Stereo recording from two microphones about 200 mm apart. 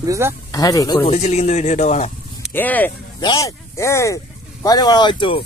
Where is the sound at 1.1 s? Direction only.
35° left (ahead or behind).